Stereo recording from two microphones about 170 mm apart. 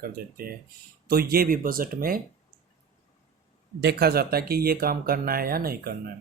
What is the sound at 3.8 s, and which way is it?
Speech, 70° right (ahead or behind).